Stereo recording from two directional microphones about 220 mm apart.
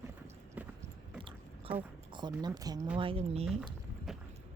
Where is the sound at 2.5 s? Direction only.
15° right (ahead or behind).